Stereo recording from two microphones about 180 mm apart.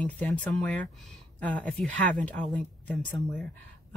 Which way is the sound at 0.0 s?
5° left (ahead or behind).